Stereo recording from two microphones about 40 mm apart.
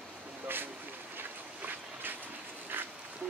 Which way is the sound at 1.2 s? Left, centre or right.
Right.